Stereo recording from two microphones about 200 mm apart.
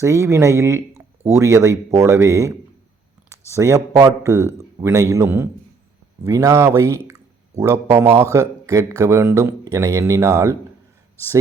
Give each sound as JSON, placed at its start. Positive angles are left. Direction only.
{"t": 0.0, "sound": "speech", "side_deg": -15}
{"t": 3.5, "sound": "speech", "side_deg": -15}